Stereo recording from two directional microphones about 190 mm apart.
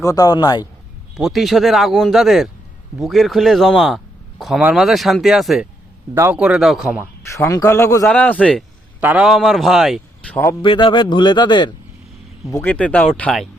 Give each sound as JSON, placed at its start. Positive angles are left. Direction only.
{"t": 0.0, "sound": "a man's voice", "side_deg": 20}
{"t": 1.1, "sound": "speech", "side_deg": 0}
{"t": 7.3, "sound": "speech", "side_deg": 15}
{"t": 9.0, "sound": "speech", "side_deg": -10}
{"t": 10.6, "sound": "a man's voice", "side_deg": 25}
{"t": 12.5, "sound": "speech", "side_deg": 10}